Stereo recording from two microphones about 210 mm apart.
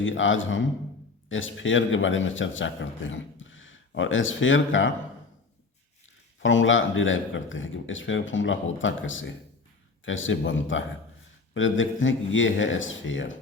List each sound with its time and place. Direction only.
0.0 s a man's voice: 65° left (ahead or behind)
6.4 s a man's voice: 65° left (ahead or behind)